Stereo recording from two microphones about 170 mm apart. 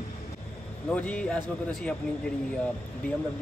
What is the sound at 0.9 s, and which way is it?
Speech, 10° left (ahead or behind).